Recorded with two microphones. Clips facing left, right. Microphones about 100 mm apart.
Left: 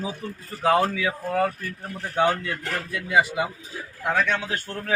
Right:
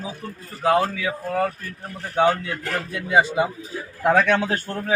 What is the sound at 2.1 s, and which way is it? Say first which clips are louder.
A man's voice: right 3 dB; 15° right (ahead or behind).